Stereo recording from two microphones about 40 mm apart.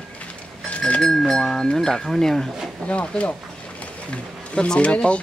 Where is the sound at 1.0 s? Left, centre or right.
Centre.